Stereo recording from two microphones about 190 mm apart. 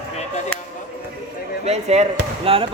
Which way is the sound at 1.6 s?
35° right (ahead or behind).